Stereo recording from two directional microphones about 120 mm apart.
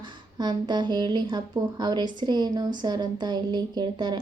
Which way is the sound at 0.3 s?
35° right (ahead or behind).